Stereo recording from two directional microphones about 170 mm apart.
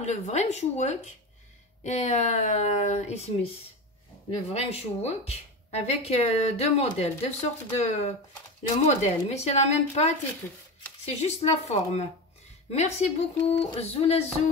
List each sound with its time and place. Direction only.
0.0 s a woman's voice: 40° left (ahead or behind)
4.4 s a woman's voice: 40° left (ahead or behind)